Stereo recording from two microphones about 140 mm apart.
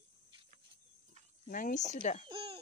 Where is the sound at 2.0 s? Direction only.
55° left (ahead or behind).